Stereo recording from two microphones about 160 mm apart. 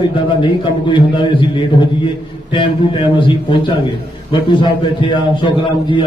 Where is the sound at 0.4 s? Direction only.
30° left (ahead or behind).